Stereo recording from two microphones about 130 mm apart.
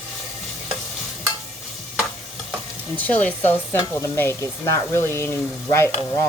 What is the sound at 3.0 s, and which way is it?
Speech, 10° left (ahead or behind).